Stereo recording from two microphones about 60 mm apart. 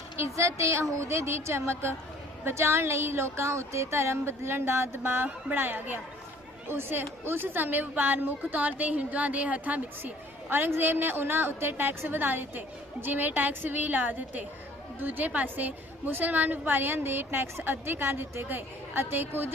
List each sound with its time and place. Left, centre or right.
0.2 s speech: right
5.2 s a woman's voice: right
10.5 s a woman's voice: right